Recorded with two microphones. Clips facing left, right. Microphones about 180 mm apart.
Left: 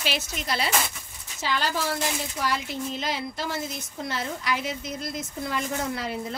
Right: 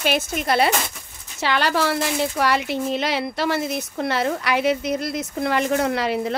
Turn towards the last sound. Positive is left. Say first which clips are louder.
# right 8 dB
turn(degrees=-80)